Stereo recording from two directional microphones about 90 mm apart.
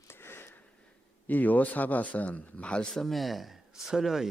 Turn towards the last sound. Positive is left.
turn(degrees=-5)  # may be behind; listen again after turning